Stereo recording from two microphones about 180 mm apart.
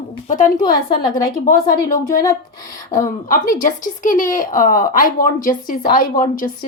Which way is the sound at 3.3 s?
45° left (ahead or behind).